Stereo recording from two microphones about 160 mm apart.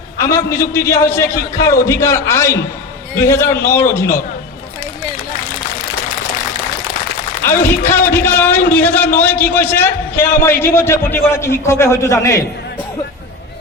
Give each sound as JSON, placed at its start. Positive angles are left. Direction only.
{"t": 0.3, "sound": "a man's voice", "side_deg": 15}
{"t": 7.4, "sound": "a man's voice", "side_deg": 15}